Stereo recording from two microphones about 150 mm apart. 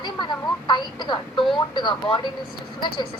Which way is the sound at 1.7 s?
30° left (ahead or behind).